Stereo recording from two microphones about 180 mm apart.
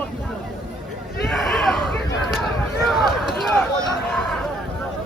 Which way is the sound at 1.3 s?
Centre (ahead or behind).